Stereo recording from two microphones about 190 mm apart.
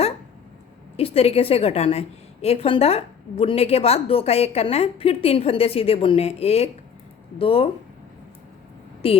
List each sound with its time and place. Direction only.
0.9 s a woman's voice: 30° left (ahead or behind)
9.0 s speech: 30° left (ahead or behind)